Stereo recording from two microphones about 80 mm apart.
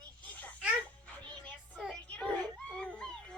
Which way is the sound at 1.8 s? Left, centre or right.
Centre.